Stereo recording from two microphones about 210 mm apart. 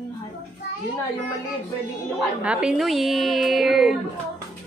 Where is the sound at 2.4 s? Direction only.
5° right (ahead or behind).